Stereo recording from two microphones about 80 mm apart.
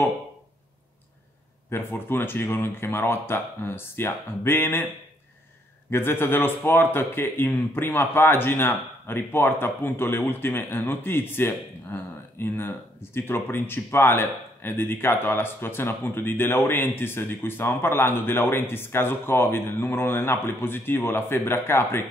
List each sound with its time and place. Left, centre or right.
1.7 s a man's voice: left
5.9 s a man's voice: left